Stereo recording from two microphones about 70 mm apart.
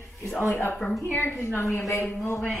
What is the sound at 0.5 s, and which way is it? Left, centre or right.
A woman's voice, left.